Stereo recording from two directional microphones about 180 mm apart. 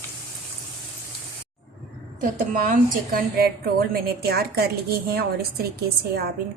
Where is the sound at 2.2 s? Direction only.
50° right (ahead or behind).